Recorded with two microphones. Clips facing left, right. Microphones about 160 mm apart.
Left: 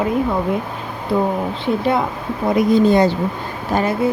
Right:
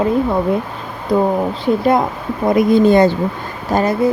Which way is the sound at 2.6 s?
55° right (ahead or behind).